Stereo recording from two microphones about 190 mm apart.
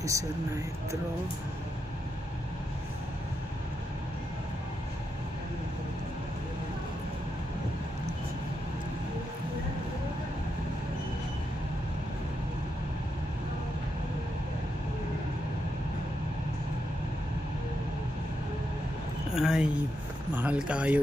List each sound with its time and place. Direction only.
0.0 s speech: 15° right (ahead or behind)
19.3 s a sound: 5° right (ahead or behind)
20.3 s speech: 5° right (ahead or behind)